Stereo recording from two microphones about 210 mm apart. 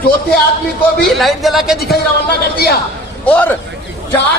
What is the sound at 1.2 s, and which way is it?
Speech, centre (ahead or behind).